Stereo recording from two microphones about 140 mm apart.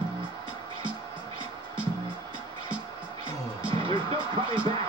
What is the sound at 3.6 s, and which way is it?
Music, 35° right (ahead or behind).